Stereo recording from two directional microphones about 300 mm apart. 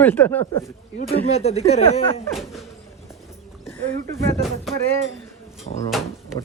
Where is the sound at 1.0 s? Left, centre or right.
Left.